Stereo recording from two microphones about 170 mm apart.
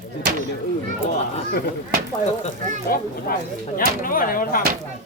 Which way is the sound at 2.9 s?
60° left (ahead or behind).